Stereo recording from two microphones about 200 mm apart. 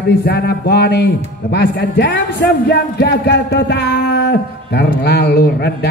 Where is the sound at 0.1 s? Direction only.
50° left (ahead or behind).